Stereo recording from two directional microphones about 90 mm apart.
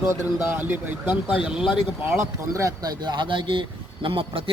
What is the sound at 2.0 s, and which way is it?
Speech, 30° right (ahead or behind).